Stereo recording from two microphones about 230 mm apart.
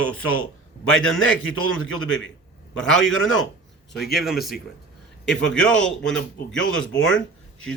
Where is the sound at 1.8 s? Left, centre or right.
Left.